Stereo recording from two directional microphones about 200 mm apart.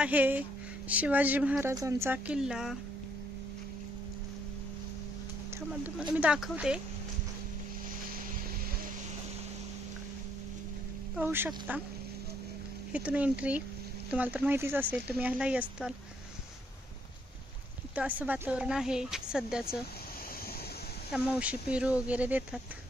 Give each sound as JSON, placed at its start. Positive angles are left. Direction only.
{"t": 0.0, "sound": "speech", "side_deg": -10}
{"t": 5.7, "sound": "a woman's voice", "side_deg": -5}
{"t": 11.1, "sound": "speech", "side_deg": -10}
{"t": 12.9, "sound": "speech", "side_deg": -5}
{"t": 17.9, "sound": "a woman's voice", "side_deg": -10}
{"t": 21.1, "sound": "speech", "side_deg": -5}